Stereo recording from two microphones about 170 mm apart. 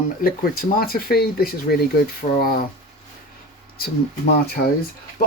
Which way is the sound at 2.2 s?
35° left (ahead or behind).